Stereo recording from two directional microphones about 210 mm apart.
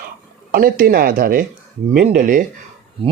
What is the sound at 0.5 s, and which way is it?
Speech, 40° right (ahead or behind).